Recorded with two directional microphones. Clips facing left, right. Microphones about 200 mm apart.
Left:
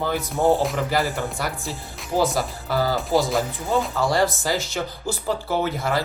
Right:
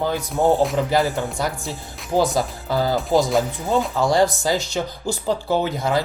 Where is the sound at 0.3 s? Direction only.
Centre (ahead or behind).